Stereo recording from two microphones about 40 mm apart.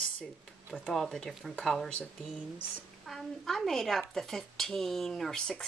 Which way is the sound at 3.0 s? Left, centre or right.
Centre.